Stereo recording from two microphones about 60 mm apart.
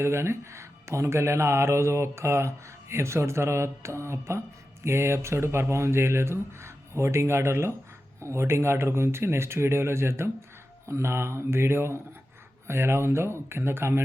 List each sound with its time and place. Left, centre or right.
0.0 s speech: right